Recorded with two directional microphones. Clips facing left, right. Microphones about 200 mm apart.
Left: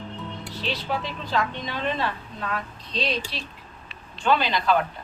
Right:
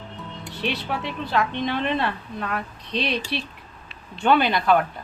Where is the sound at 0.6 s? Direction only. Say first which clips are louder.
Right 2 dB; 65° right (ahead or behind).